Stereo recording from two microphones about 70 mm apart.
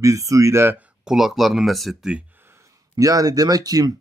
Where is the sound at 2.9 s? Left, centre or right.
Right.